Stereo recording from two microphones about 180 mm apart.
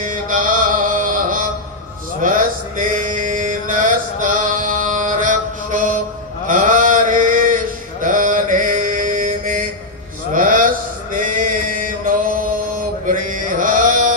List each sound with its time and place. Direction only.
0.0 s mantra: 50° right (ahead or behind)
10.3 s a sound: 45° right (ahead or behind)
11.1 s mantra: 45° right (ahead or behind)